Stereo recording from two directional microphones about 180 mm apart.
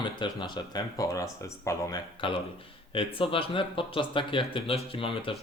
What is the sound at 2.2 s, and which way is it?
Speech, 30° left (ahead or behind).